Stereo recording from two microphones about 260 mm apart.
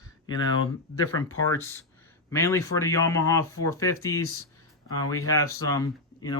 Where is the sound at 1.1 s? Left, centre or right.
Left.